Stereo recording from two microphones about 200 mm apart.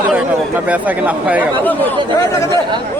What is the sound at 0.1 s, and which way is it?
Speech, 5° right (ahead or behind).